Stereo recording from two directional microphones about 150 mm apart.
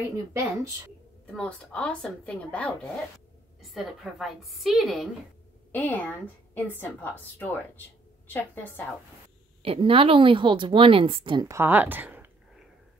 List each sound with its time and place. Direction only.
0.3 s speech: 20° right (ahead or behind)
1.2 s a woman's voice: 5° left (ahead or behind)
5.7 s a woman's voice: 10° left (ahead or behind)
9.6 s speech: 35° right (ahead or behind)
11.4 s speech: 15° right (ahead or behind)